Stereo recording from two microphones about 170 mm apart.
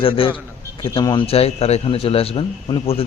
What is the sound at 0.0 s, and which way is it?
A man's voice, 30° left (ahead or behind).